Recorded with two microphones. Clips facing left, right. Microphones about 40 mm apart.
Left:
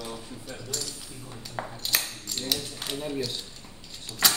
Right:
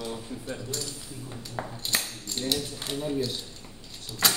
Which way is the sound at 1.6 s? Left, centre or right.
Centre.